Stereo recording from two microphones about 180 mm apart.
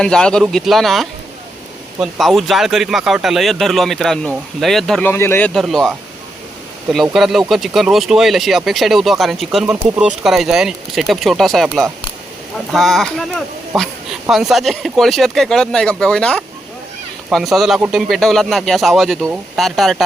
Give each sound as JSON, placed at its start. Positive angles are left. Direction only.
{"t": 0.0, "sound": "speech", "side_deg": 5}
{"t": 5.5, "sound": "speech", "side_deg": 0}